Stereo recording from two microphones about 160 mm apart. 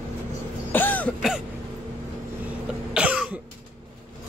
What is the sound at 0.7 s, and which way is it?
Throat clearing, 10° left (ahead or behind).